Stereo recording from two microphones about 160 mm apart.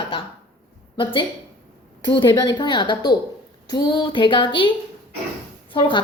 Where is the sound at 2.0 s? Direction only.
30° left (ahead or behind).